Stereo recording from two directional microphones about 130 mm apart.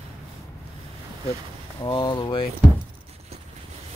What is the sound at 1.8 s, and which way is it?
Speech, 40° left (ahead or behind).